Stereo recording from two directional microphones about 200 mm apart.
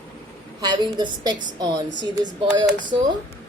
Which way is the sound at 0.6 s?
20° right (ahead or behind).